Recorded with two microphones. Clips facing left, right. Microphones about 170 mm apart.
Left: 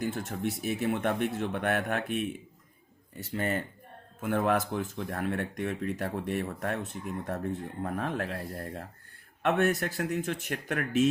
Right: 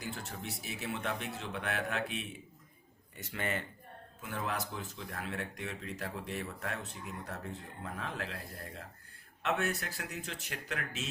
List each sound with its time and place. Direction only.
0.0 s speech: 45° left (ahead or behind)
3.3 s speech: 40° left (ahead or behind)
4.2 s speech: 55° left (ahead or behind)